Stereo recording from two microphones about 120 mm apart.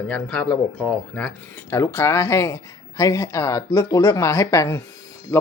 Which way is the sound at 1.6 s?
20° left (ahead or behind).